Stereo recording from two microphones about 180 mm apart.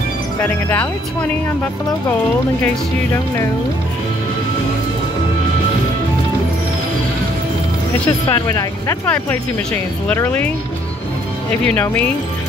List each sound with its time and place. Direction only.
0.4 s speech: 10° left (ahead or behind)
8.3 s speech: 20° left (ahead or behind)
9.0 s speech: 10° left (ahead or behind)
11.6 s speech: 10° left (ahead or behind)